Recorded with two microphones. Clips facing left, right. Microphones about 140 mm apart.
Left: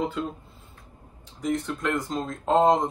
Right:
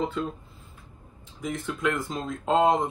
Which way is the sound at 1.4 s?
Centre (ahead or behind).